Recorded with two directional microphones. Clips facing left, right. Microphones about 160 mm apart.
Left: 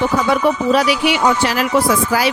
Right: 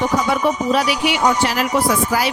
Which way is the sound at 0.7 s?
90° left.